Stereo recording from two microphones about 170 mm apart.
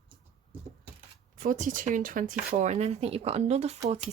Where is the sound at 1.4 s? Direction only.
50° right (ahead or behind).